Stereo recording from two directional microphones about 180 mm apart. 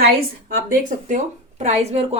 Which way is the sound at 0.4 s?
45° right (ahead or behind).